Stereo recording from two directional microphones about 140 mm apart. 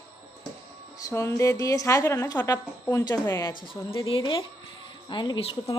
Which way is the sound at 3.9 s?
35° left (ahead or behind).